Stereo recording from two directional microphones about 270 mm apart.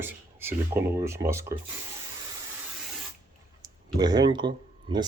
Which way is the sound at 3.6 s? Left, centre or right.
Centre.